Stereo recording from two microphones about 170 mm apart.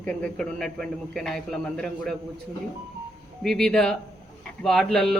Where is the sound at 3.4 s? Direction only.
5° left (ahead or behind).